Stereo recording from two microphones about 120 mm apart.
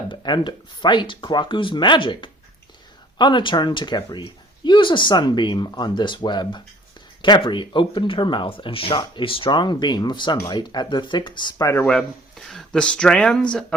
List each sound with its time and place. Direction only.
0.1 s speech: 40° left (ahead or behind)
11.6 s speech: 20° left (ahead or behind)
12.5 s speech: 5° left (ahead or behind)